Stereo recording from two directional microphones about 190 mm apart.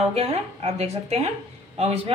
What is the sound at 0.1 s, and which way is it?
Speech, 30° right (ahead or behind).